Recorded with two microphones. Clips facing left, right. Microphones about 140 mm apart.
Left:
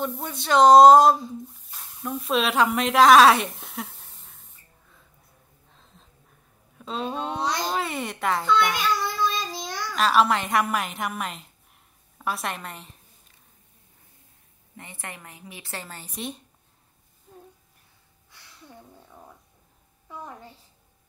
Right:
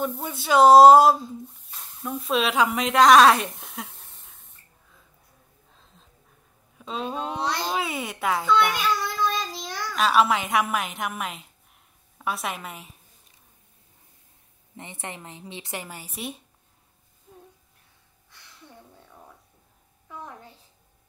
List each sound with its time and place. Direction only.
0.0 s speech: 5° right (ahead or behind)
6.8 s a woman's voice: centre (ahead or behind)
7.4 s speech: 10° left (ahead or behind)
7.7 s a woman's voice: centre (ahead or behind)
14.8 s a woman's voice: 20° right (ahead or behind); by 16.4 s 5° right (ahead or behind)
17.3 s a sound: centre (ahead or behind)